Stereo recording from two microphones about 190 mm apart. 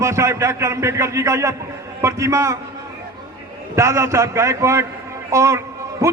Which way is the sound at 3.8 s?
15° right (ahead or behind).